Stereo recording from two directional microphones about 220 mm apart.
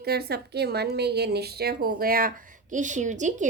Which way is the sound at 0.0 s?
45° right (ahead or behind).